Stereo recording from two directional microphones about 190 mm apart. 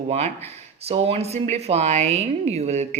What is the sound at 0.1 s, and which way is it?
Speech, 35° right (ahead or behind).